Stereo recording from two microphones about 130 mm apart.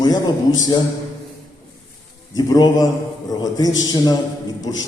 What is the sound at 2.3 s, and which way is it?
A man's voice, 30° left (ahead or behind).